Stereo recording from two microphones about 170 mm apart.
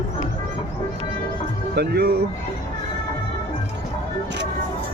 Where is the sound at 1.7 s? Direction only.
70° right (ahead or behind).